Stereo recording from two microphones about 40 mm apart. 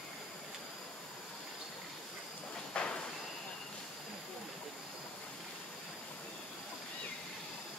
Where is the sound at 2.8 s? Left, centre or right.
Left.